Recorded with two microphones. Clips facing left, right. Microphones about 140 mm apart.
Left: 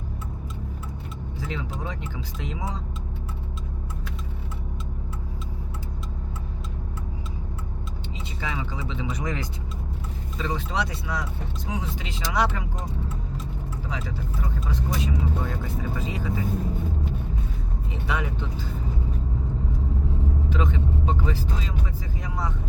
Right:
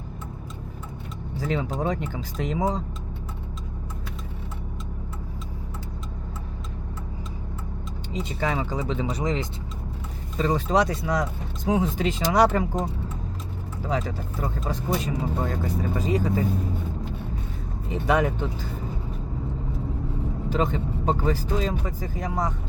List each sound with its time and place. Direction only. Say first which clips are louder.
1.4 s speech: right 7 dB; 45° right (ahead or behind)
8.1 s speech: right 7 dB; 45° right (ahead or behind)
9.2 s speech: right 5 dB; 25° right (ahead or behind)
10.3 s speech: right 7 dB; 45° right (ahead or behind)
13.8 s speech: right 7 dB; 45° right (ahead or behind)
18.0 s speech: right 8 dB; 45° right (ahead or behind)
20.5 s speech: right 4 dB; 40° right (ahead or behind)